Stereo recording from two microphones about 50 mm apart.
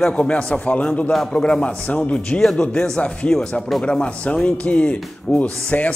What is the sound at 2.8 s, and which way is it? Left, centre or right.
Speech, centre.